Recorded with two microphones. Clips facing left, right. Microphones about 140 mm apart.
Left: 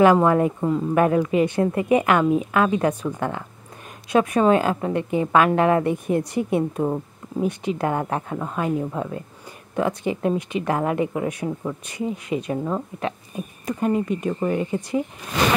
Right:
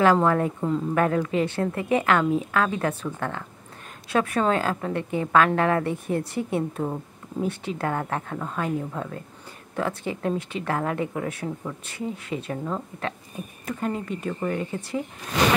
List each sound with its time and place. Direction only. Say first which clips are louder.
0.0 s a woman's voice: left 4 dB; 15° left (ahead or behind)